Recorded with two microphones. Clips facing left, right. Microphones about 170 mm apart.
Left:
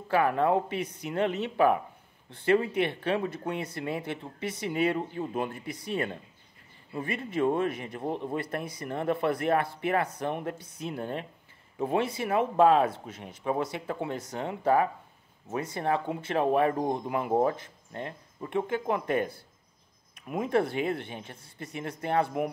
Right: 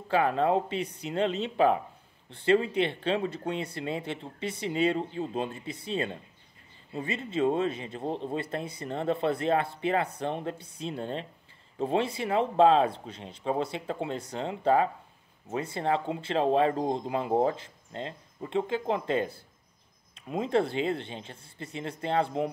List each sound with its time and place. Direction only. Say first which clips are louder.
0.1 s speech: even; 25° right (ahead or behind)
8.0 s speech: even; 60° left (ahead or behind)
8.4 s speech: even; 25° right (ahead or behind)